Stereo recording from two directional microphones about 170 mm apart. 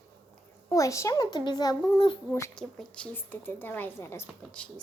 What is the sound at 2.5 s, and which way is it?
A woman's voice, 5° left (ahead or behind).